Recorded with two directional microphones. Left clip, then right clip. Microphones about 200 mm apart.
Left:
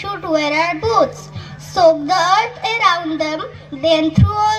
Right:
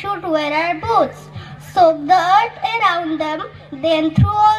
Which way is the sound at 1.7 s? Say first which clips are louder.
Even; 40° left (ahead or behind).